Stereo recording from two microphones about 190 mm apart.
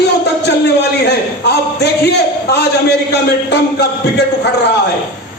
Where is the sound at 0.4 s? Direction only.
60° left (ahead or behind).